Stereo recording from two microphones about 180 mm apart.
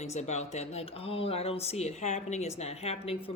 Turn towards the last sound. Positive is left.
turn(degrees=35)  # may be behind; listen again after turning